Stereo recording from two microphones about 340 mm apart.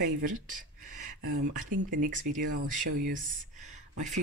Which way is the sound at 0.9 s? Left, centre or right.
Right.